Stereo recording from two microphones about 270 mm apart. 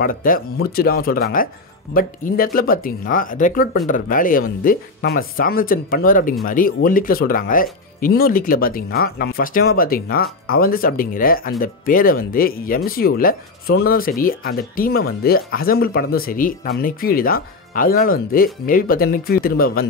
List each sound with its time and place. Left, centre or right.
0.0 s speech: left